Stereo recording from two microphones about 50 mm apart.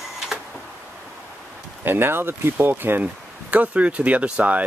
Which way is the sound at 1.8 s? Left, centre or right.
Right.